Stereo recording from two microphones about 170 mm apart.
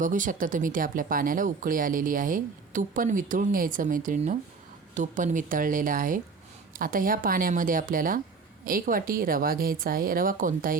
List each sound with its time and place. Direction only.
0.0 s a woman's voice: 50° right (ahead or behind)